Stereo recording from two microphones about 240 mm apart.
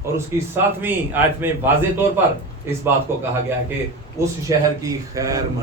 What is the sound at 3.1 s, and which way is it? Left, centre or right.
A man's voice, centre.